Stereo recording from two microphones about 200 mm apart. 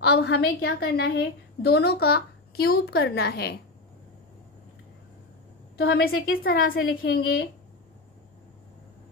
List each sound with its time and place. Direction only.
0.0 s a woman's voice: 55° left (ahead or behind)
5.8 s a woman's voice: 55° left (ahead or behind)